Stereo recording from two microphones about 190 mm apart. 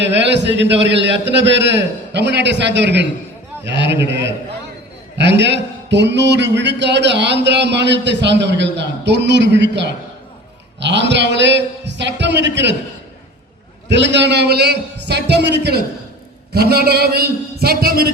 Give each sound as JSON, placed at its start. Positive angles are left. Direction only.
{"t": 0.0, "sound": "a man's voice", "side_deg": -65}
{"t": 13.8, "sound": "a man's voice", "side_deg": -65}